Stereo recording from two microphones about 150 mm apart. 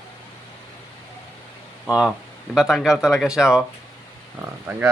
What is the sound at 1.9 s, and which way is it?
A man's voice, 5° right (ahead or behind).